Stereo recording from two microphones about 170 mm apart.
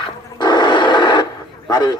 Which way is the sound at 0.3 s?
25° left (ahead or behind).